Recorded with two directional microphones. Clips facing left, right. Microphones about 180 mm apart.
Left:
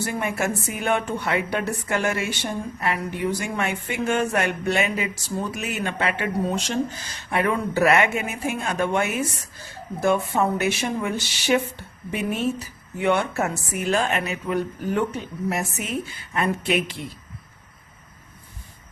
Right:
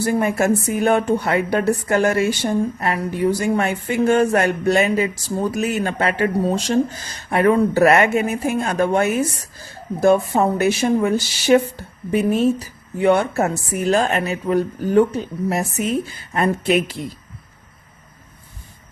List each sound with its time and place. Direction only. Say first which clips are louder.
0.0 s speech: right 7 dB; 40° right (ahead or behind)